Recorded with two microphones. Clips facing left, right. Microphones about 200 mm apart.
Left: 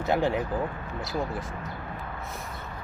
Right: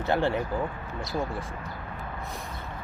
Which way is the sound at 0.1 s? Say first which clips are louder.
Even; 15° left (ahead or behind).